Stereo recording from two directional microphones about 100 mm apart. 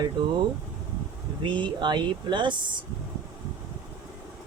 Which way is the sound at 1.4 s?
50° right (ahead or behind).